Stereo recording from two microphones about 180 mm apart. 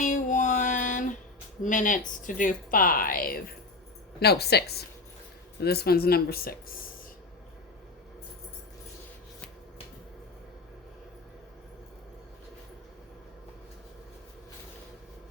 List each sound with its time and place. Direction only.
0.0 s female singing: 45° left (ahead or behind)
1.6 s speech: 45° left (ahead or behind)
4.2 s speech: 65° left (ahead or behind)